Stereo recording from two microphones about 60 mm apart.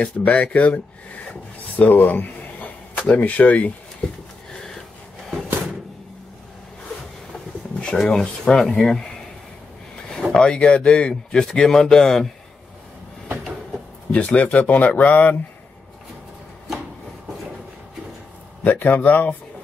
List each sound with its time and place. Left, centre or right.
0.0 s speech: left
1.3 s a sound: left
3.2 s speech: left
4.6 s a sound: centre
7.8 s speech: centre
8.7 s speech: centre
10.3 s speech: centre
14.1 s speech: left
18.6 s speech: left